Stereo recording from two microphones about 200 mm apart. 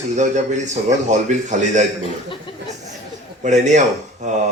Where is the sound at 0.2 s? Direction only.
35° right (ahead or behind).